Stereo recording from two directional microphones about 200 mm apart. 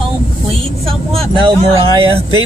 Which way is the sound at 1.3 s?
25° right (ahead or behind).